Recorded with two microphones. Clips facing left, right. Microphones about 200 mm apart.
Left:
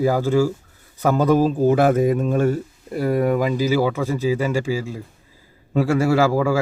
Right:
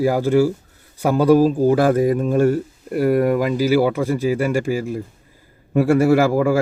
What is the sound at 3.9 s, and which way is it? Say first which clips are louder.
Speech: right 3 dB; 15° right (ahead or behind).